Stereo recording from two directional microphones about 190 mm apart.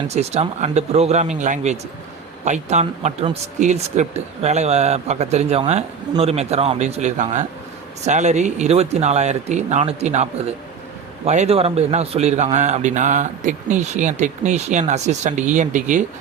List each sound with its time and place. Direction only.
0.1 s a man's voice: 35° right (ahead or behind)
11.3 s a man's voice: 35° right (ahead or behind)